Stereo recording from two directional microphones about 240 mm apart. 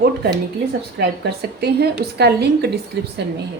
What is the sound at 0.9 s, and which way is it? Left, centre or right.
A woman's voice, right.